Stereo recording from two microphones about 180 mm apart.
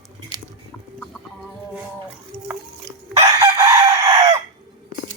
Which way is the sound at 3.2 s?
15° right (ahead or behind).